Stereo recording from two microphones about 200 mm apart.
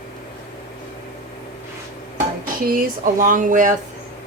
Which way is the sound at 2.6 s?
45° right (ahead or behind).